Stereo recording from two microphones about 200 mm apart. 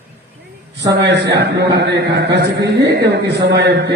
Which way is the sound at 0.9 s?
60° right (ahead or behind).